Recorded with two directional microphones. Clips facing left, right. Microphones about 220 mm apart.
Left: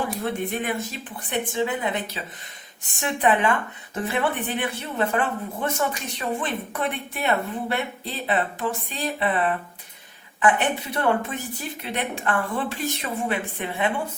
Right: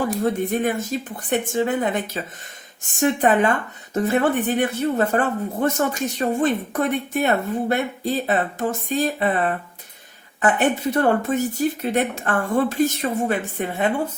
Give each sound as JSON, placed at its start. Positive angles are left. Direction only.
{"t": 0.4, "sound": "speech", "side_deg": -45}